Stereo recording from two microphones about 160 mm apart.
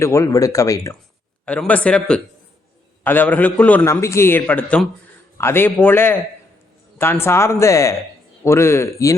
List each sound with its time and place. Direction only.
0.0 s speech: 20° left (ahead or behind)
1.5 s a man's voice: 10° left (ahead or behind)